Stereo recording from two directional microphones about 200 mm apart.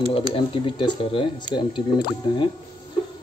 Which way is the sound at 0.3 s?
25° left (ahead or behind).